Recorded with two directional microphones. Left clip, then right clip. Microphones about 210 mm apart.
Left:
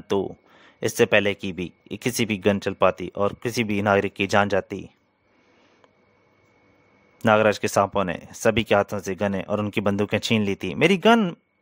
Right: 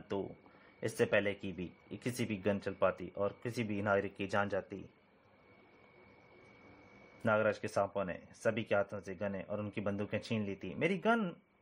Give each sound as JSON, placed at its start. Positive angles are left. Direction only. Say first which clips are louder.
{"t": 0.1, "sound": "speech", "louder": "left 15 dB", "side_deg": 55}
{"t": 7.2, "sound": "speech", "louder": "left 14 dB", "side_deg": 50}